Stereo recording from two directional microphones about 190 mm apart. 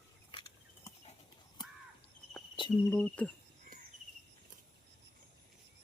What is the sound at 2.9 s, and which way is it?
Cricket, 5° left (ahead or behind).